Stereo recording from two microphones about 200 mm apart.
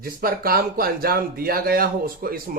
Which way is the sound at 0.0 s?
50° right (ahead or behind).